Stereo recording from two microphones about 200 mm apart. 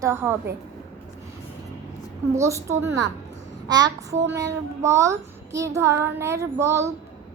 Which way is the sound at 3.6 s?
20° right (ahead or behind).